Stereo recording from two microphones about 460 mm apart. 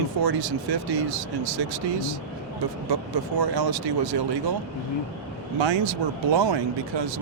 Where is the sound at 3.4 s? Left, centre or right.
Right.